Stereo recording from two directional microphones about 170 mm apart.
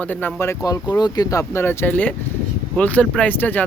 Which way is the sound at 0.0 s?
10° left (ahead or behind).